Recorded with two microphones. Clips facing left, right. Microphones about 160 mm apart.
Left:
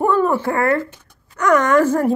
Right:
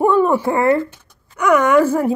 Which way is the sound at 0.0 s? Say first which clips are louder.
Right 2 dB; 15° right (ahead or behind).